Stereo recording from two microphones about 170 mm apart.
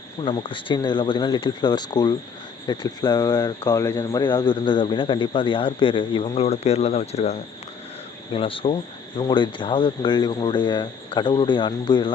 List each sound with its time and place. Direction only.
0.2 s speech: 30° left (ahead or behind)